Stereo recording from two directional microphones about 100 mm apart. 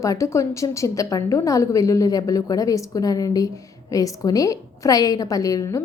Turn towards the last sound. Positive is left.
turn(degrees=35)  # may be behind; listen again after turning